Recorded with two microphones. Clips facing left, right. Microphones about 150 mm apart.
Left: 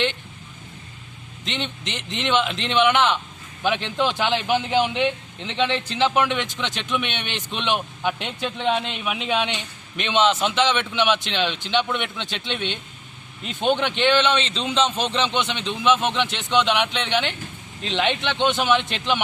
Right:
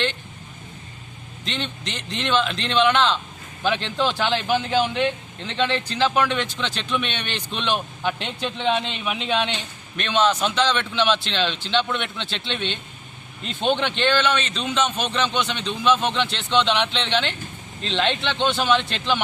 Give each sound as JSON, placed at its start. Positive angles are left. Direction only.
{"t": 1.5, "sound": "a man's voice", "side_deg": 20}
{"t": 8.2, "sound": "speech", "side_deg": 5}
{"t": 10.0, "sound": "speech", "side_deg": 20}